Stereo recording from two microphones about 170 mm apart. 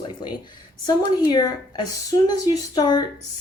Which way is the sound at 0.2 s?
25° left (ahead or behind).